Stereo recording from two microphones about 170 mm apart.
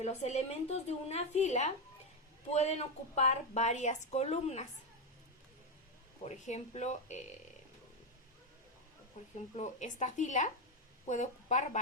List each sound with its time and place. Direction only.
0.0 s speech: 40° left (ahead or behind)
6.2 s speech: 40° left (ahead or behind)
9.6 s a woman's voice: 45° left (ahead or behind)